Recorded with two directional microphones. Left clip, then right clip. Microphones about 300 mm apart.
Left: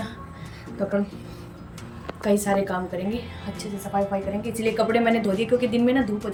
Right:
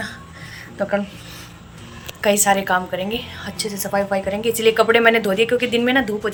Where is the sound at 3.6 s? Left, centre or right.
Right.